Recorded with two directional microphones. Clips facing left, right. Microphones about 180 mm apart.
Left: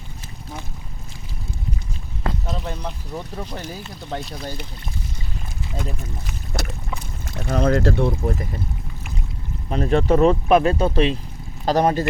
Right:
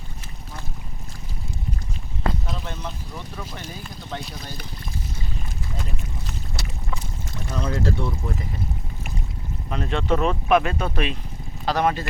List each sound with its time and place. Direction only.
6.6 s a sound: 45° left (ahead or behind)
7.4 s speech: 65° left (ahead or behind)
9.6 s speech: 40° left (ahead or behind)
11.6 s speech: 40° left (ahead or behind)